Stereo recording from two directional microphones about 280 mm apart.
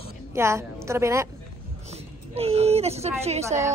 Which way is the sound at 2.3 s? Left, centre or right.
Right.